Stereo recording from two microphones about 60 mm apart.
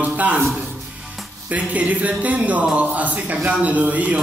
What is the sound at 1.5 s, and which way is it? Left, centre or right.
Speech, right.